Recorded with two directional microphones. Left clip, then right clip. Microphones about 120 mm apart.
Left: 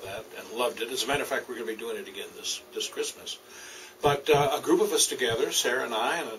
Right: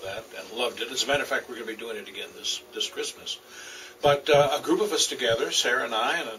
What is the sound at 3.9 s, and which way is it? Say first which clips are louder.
Speech: right 3 dB; 15° left (ahead or behind).